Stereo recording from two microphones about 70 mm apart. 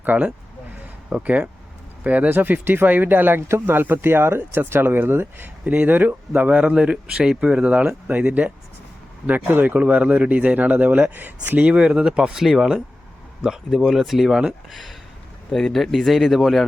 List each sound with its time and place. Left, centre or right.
0.0 s speech: right
5.7 s speech: centre